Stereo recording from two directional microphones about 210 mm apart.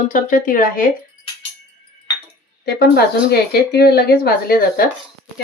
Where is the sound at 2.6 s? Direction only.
50° left (ahead or behind).